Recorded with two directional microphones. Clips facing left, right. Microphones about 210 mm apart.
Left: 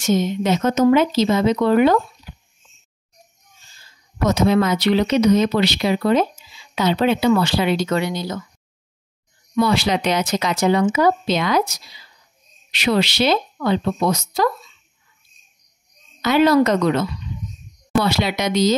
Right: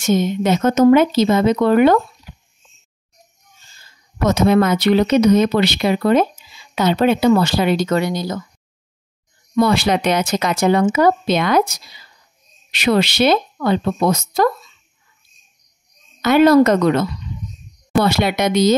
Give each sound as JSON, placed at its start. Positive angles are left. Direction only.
{"t": 0.0, "sound": "speech", "side_deg": -50}
{"t": 4.3, "sound": "speech", "side_deg": -55}
{"t": 9.6, "sound": "speech", "side_deg": -50}
{"t": 16.2, "sound": "speech", "side_deg": -50}
{"t": 18.0, "sound": "speech", "side_deg": -50}